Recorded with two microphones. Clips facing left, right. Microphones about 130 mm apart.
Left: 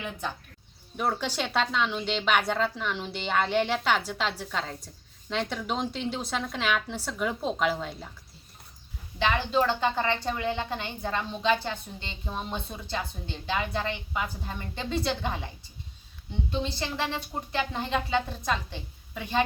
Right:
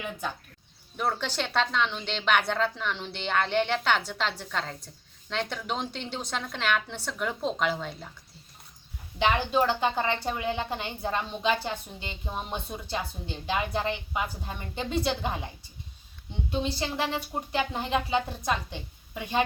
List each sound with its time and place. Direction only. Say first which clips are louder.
0.9 s a woman's voice: left 1 dB; 5° left (ahead or behind)
9.1 s a woman's voice: right 1 dB; 15° right (ahead or behind)
17.2 s a woman's voice: right 1 dB; 15° right (ahead or behind)